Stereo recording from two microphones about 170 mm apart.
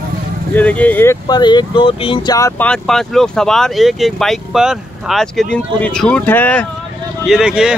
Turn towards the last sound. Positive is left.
turn(degrees=-5)  # may be behind; listen again after turning